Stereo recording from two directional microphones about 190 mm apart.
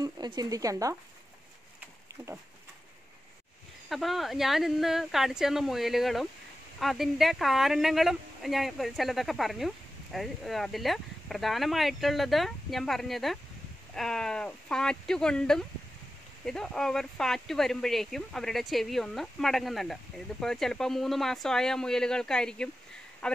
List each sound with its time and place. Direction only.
0.0 s speech: 20° right (ahead or behind)
3.9 s a woman's voice: centre (ahead or behind)